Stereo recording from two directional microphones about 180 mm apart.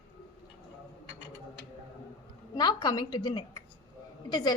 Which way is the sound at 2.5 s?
20° left (ahead or behind).